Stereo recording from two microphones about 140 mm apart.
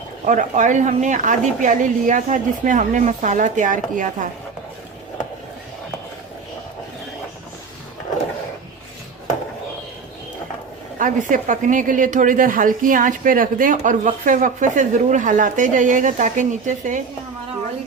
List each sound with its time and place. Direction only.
0.3 s a woman's voice: 60° right (ahead or behind)
10.9 s speech: 70° right (ahead or behind)